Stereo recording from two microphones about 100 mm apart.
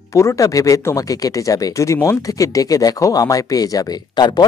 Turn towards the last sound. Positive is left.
turn(degrees=45)  # may be behind; listen again after turning